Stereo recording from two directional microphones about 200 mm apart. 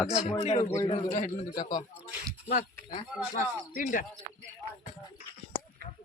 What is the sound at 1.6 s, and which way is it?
Speech, 20° left (ahead or behind).